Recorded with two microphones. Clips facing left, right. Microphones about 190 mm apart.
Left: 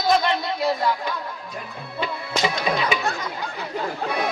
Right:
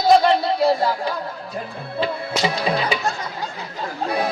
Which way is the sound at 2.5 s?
35° right (ahead or behind).